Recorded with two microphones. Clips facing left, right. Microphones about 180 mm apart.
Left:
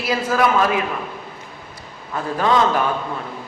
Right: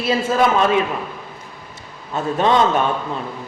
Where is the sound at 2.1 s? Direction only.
25° right (ahead or behind).